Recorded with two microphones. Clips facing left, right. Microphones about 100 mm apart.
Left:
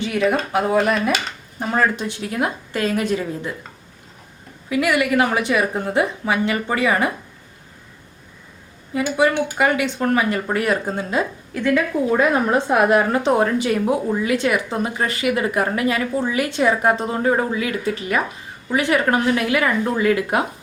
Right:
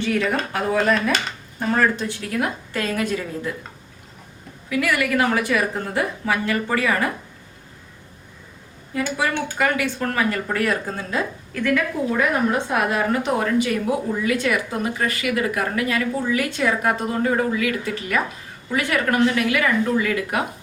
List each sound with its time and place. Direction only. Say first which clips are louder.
0.0 s speech: left 2 dB; 15° left (ahead or behind)
4.7 s speech: left 3 dB; 20° left (ahead or behind)
9.0 s speech: left 5 dB; 20° left (ahead or behind)